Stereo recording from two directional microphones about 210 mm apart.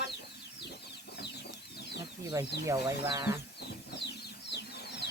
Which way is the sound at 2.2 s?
20° right (ahead or behind).